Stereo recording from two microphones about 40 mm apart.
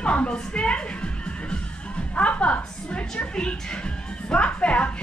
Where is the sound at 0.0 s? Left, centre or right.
Left.